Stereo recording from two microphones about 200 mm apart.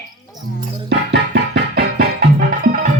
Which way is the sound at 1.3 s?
55° right (ahead or behind).